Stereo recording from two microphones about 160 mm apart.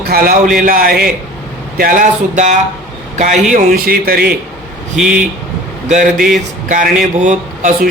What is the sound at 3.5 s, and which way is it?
Speech, 65° right (ahead or behind).